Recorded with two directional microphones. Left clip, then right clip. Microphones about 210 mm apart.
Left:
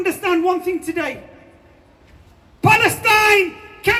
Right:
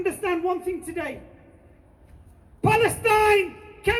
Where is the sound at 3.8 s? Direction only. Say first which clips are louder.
Left 6 dB; 55° left (ahead or behind).